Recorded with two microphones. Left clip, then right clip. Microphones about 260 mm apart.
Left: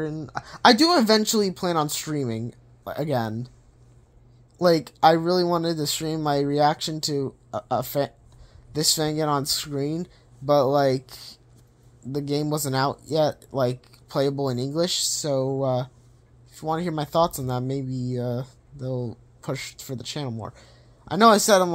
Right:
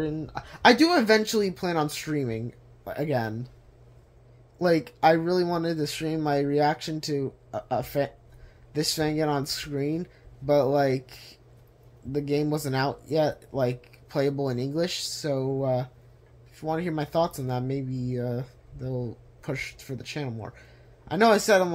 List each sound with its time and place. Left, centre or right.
0.0 s speech: centre
4.6 s speech: centre